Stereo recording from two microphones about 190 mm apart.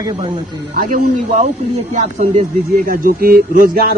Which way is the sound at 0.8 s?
45° right (ahead or behind).